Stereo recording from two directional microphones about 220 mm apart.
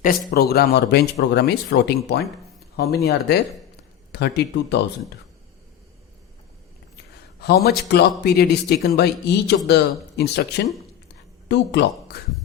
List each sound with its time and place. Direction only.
0.0 s speech: 40° left (ahead or behind)
7.4 s speech: 45° left (ahead or behind)